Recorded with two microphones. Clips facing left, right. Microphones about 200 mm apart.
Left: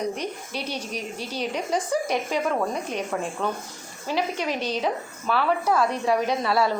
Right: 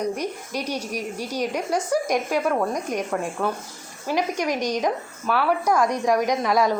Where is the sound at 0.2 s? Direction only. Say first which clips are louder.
Right 3 dB; 10° right (ahead or behind).